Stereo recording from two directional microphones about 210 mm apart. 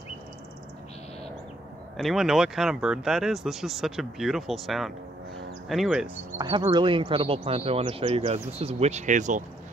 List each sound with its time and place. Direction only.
2.0 s speech: centre (ahead or behind)
6.3 s speech: 20° right (ahead or behind); by 9.4 s 35° right (ahead or behind)